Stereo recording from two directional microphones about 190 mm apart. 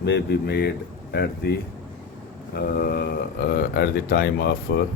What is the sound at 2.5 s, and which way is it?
Speech, 55° left (ahead or behind).